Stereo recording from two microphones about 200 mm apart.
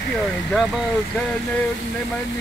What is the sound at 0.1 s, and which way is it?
Speech, centre (ahead or behind).